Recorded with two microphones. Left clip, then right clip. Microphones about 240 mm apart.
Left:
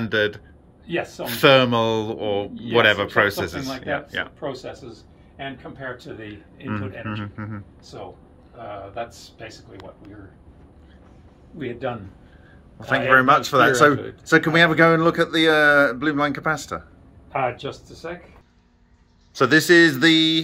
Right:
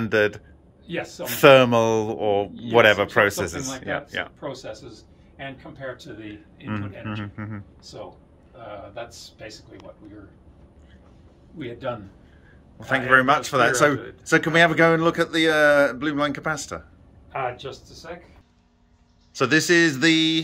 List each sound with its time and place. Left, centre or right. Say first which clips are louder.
0.0 s a man's voice: right 1 dB; centre
0.8 s speech: left 4 dB; centre
1.2 s a man's voice: right 2 dB; centre
6.2 s a man's voice: left 2 dB; centre
12.8 s a man's voice: left 2 dB; centre
17.3 s speech: left 4 dB; left
19.3 s a man's voice: left 4 dB; centre